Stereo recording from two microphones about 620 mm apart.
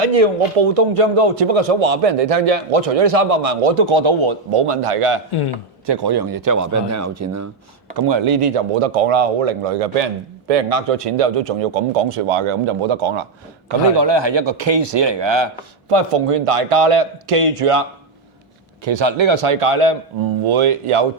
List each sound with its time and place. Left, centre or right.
0.0 s a man's voice: right
5.8 s a man's voice: right
7.9 s a man's voice: right
15.9 s a man's voice: right
18.9 s a man's voice: right